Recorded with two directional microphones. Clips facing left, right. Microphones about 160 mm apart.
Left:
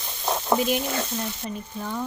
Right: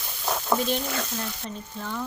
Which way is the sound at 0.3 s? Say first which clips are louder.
Left 2 dB; 20° left (ahead or behind).